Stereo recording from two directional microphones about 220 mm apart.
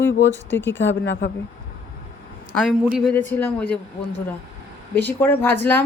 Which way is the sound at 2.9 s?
5° left (ahead or behind).